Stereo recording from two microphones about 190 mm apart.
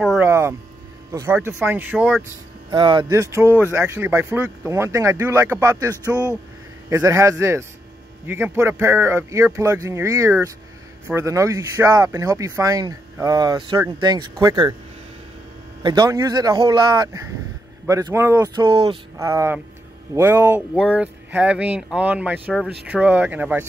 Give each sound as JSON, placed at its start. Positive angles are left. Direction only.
{"t": 0.0, "sound": "speech", "side_deg": 0}
{"t": 0.3, "sound": "speech", "side_deg": -15}
{"t": 2.7, "sound": "speech", "side_deg": -25}
{"t": 15.8, "sound": "speech", "side_deg": -20}